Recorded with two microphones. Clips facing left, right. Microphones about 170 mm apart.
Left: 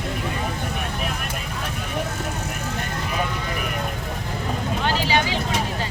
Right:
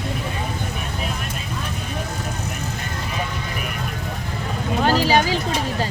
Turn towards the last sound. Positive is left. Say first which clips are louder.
# right 4 dB
turn(degrees=-40)  # may be behind; listen again after turning